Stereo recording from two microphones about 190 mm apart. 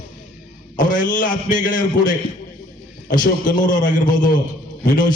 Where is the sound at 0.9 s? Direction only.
45° left (ahead or behind).